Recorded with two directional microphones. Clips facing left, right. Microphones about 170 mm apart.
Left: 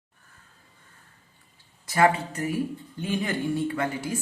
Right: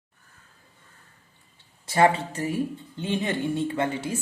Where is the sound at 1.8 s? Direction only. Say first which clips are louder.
Right 1 dB; 30° right (ahead or behind).